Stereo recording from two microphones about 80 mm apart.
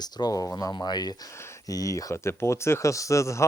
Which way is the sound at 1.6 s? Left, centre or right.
Left.